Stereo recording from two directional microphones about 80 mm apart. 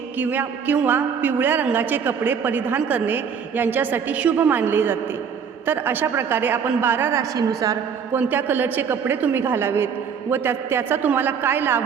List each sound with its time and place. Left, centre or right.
0.2 s a woman's voice: right
7.2 s a woman's voice: right
8.1 s a woman's voice: right